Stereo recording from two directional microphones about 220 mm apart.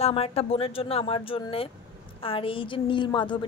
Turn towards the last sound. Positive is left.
turn(degrees=20)  # may be behind; listen again after turning